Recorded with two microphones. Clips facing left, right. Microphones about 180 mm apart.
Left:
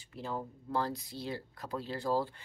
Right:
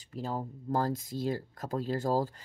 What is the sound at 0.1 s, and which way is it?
Speech, 40° right (ahead or behind).